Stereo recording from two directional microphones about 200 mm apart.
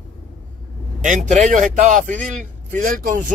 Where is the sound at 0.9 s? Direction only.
35° right (ahead or behind).